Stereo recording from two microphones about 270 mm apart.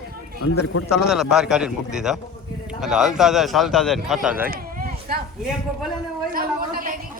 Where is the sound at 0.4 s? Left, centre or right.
Left.